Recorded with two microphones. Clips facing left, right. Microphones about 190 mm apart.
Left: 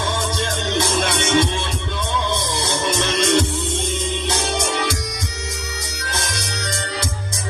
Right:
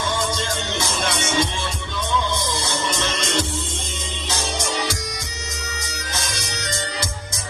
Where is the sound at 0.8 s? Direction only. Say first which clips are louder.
Left 6 dB; 60° left (ahead or behind).